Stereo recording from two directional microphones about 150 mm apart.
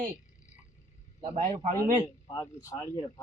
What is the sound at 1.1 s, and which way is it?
Speech, 35° right (ahead or behind).